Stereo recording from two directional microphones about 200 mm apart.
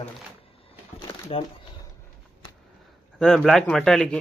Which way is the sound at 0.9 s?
25° left (ahead or behind).